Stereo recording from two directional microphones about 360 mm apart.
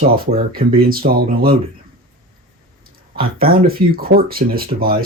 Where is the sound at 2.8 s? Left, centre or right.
Right.